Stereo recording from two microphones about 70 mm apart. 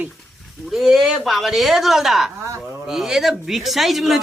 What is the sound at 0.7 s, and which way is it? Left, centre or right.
Speech, centre.